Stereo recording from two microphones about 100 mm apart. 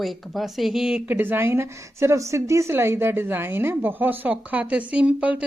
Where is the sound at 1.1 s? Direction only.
20° right (ahead or behind).